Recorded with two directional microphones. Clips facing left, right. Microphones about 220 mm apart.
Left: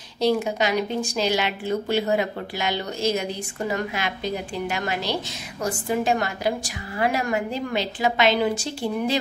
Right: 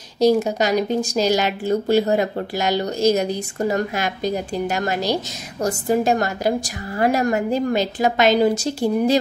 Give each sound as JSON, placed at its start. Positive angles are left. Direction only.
{"t": 0.2, "sound": "a woman's voice", "side_deg": -40}